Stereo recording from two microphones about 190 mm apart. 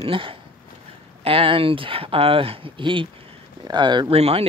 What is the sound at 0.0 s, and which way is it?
Speech, 30° right (ahead or behind).